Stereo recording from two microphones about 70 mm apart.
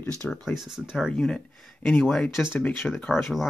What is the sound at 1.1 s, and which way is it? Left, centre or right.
Speech, centre.